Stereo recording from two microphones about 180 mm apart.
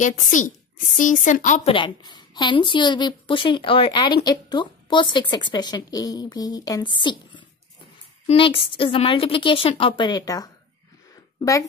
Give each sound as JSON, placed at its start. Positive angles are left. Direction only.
{"t": 0.0, "sound": "a woman's voice", "side_deg": 45}
{"t": 1.7, "sound": "a woman's voice", "side_deg": 25}